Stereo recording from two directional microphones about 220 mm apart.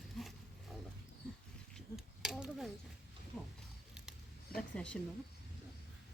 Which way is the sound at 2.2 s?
Centre (ahead or behind).